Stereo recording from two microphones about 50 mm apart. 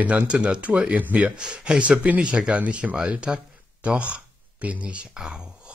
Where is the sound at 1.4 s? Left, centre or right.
Centre.